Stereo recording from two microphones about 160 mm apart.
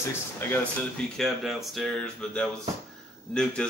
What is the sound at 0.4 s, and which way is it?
A man's voice, 10° left (ahead or behind).